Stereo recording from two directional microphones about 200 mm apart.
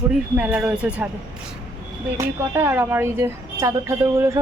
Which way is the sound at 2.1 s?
15° right (ahead or behind).